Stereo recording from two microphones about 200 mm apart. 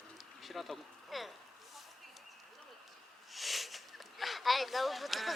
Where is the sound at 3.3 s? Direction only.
Centre (ahead or behind).